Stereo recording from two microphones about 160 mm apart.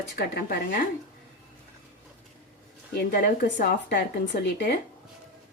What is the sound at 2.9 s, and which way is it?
Speech, 75° left (ahead or behind).